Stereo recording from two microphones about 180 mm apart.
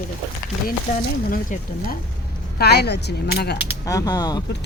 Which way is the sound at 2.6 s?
65° left (ahead or behind).